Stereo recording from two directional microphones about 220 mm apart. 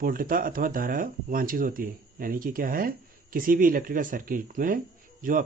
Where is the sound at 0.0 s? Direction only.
40° right (ahead or behind).